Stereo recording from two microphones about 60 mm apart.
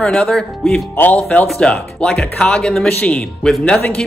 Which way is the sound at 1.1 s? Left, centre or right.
Left.